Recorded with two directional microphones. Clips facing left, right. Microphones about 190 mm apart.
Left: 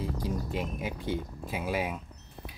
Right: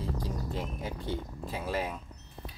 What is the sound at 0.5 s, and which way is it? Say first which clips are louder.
Speech: left 2 dB; 15° left (ahead or behind).